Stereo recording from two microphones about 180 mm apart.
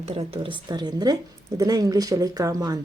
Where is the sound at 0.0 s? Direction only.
35° right (ahead or behind).